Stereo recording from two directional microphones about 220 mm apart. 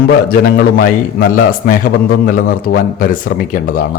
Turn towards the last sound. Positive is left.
turn(degrees=40)  # may be behind; listen again after turning